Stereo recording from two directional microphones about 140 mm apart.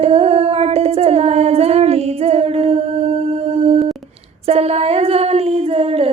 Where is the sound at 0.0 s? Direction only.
45° right (ahead or behind).